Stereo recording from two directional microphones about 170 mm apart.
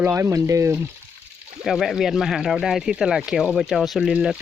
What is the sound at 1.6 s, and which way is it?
Speech, centre (ahead or behind).